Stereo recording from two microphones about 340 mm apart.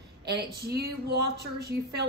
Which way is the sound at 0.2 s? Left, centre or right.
Right.